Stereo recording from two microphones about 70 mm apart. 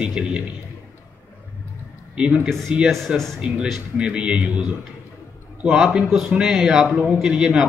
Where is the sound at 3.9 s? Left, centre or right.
Centre.